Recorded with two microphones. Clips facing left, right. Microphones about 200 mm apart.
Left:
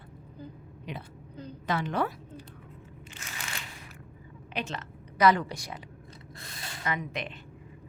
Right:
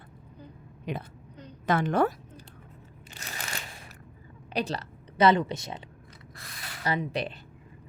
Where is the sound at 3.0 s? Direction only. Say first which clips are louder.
Right 3 dB; 35° right (ahead or behind).